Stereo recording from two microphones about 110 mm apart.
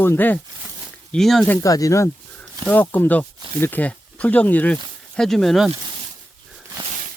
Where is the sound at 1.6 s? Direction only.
30° left (ahead or behind).